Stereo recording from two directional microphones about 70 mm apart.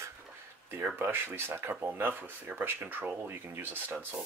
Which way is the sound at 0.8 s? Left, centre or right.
Right.